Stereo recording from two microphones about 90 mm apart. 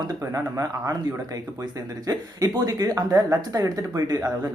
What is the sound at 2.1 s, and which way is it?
Speech, 45° right (ahead or behind).